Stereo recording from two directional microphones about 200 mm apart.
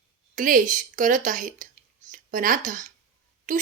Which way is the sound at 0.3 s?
40° right (ahead or behind).